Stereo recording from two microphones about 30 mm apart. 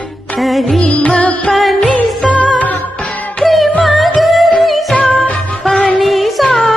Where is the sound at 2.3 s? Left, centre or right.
Left.